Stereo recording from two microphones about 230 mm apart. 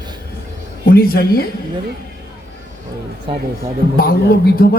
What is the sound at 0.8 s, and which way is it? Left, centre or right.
Speech, left.